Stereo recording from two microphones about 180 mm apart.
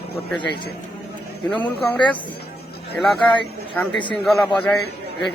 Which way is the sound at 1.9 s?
10° left (ahead or behind).